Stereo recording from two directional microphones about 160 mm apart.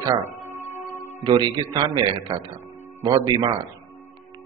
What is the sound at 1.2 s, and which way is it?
Speech, 30° right (ahead or behind).